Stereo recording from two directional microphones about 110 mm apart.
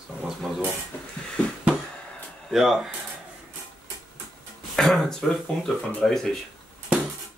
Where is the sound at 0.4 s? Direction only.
5° right (ahead or behind).